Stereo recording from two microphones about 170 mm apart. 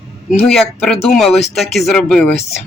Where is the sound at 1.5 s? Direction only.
Centre (ahead or behind).